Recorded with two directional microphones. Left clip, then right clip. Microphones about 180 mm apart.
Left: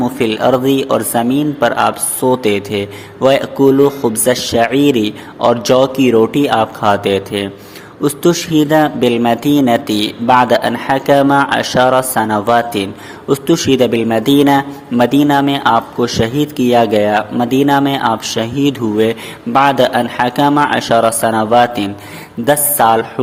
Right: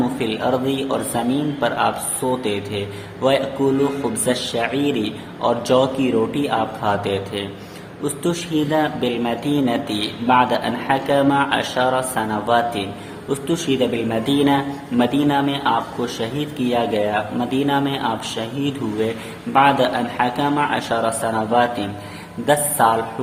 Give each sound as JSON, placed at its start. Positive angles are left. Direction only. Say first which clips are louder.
{"t": 0.2, "sound": "speech", "louder": "left 12 dB", "side_deg": 30}